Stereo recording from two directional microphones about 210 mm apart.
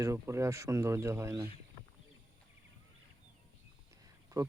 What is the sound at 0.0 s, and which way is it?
Speech, 15° right (ahead or behind).